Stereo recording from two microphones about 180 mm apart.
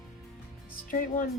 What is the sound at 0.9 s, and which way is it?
Music, 50° left (ahead or behind).